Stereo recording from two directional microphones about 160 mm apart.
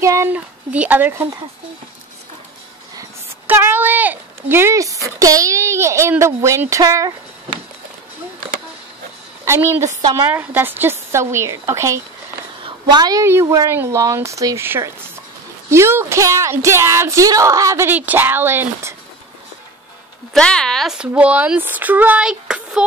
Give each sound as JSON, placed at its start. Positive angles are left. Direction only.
{"t": 0.0, "sound": "speech", "side_deg": -15}
{"t": 3.0, "sound": "speech", "side_deg": -15}
{"t": 9.4, "sound": "a woman's voice", "side_deg": -15}
{"t": 20.3, "sound": "speech", "side_deg": 5}